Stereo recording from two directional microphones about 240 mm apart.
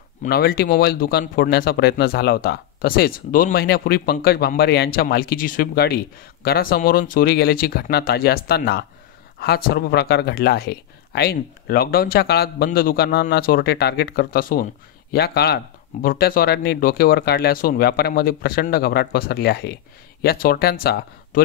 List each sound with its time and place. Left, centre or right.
0.2 s speech: left